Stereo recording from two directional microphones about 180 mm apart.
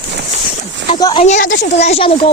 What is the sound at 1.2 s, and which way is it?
Speech, 45° left (ahead or behind).